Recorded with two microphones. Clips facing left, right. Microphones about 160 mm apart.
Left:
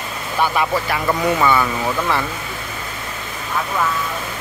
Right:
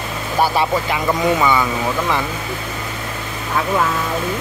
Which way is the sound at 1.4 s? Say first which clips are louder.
Even; 15° right (ahead or behind).